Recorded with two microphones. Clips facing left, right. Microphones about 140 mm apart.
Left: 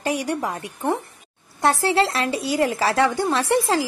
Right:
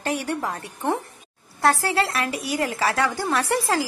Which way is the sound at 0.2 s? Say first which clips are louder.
Left 2 dB; 15° left (ahead or behind).